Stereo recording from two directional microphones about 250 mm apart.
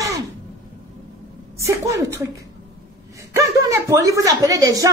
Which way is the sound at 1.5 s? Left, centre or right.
Centre.